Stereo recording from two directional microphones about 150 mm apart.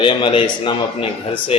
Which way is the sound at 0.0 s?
35° left (ahead or behind).